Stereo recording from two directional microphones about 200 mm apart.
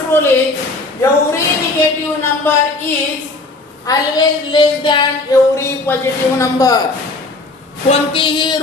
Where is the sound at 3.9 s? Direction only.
20° left (ahead or behind).